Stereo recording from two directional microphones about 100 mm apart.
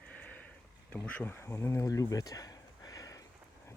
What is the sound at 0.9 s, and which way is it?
Speech, 15° left (ahead or behind).